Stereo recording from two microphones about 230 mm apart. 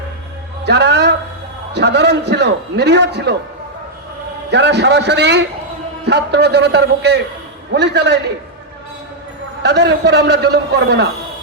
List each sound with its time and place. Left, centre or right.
0.6 s a man's voice: right
4.5 s a man's voice: right
9.6 s a man's voice: right